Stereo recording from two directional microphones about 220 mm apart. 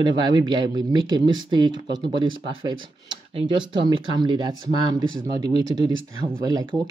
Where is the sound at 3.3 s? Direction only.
20° right (ahead or behind).